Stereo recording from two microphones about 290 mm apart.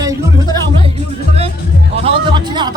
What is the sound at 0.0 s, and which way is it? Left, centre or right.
Music, centre.